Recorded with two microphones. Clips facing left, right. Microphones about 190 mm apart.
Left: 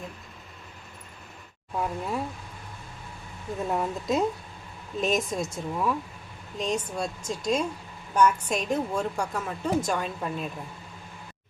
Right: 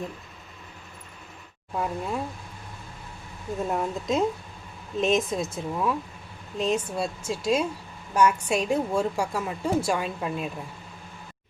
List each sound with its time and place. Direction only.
1.7 s speech: centre (ahead or behind)
3.7 s a woman's voice: centre (ahead or behind)